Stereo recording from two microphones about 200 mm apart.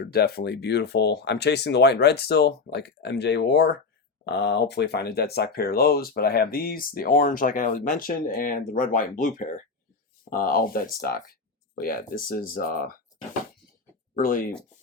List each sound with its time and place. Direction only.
0.1 s speech: 50° left (ahead or behind)
14.2 s speech: 45° left (ahead or behind)